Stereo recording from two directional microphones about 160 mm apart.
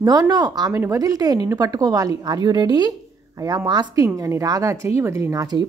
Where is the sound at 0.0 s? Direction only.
25° right (ahead or behind).